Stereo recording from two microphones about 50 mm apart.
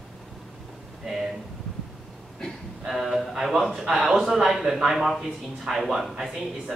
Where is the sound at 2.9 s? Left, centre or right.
Centre.